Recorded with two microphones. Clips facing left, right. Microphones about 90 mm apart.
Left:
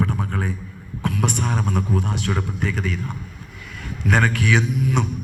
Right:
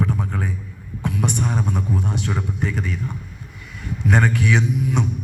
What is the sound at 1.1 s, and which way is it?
A man's voice, 75° left (ahead or behind).